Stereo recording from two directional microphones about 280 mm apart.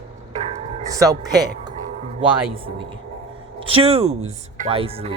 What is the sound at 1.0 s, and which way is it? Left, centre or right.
Speech, centre.